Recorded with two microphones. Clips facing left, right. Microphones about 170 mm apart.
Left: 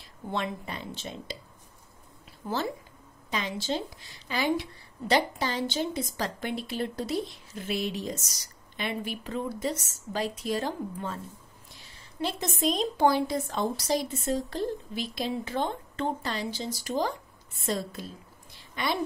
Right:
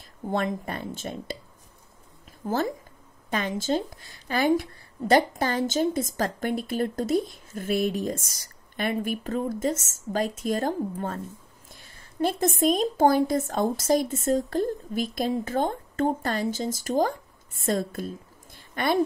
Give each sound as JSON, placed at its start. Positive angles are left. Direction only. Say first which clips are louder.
{"t": 0.3, "sound": "a woman's voice", "louder": "right 5 dB", "side_deg": -50}
{"t": 2.4, "sound": "a woman's voice", "louder": "right 4 dB", "side_deg": -45}